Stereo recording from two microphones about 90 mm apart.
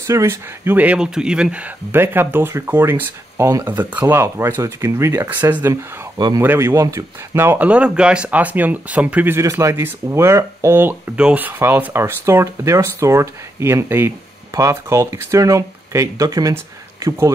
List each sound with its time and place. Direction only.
0.0 s speech: 35° right (ahead or behind)
0.7 s speech: 10° right (ahead or behind)
4.2 s speech: 30° right (ahead or behind)
5.2 s speech: 20° right (ahead or behind)
6.1 s speech: 50° right (ahead or behind)
6.4 s speech: 25° right (ahead or behind)
7.5 s speech: 15° right (ahead or behind)
9.3 s speech: 35° right (ahead or behind)
11.1 s speech: 15° right (ahead or behind); by 16.5 s 40° right (ahead or behind)